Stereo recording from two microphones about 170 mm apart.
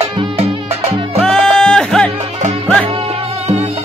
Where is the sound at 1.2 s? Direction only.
5° left (ahead or behind).